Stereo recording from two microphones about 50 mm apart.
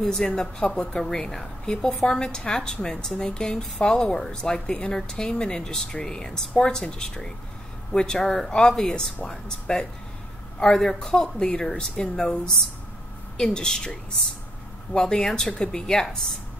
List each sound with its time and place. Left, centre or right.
0.0 s speech: centre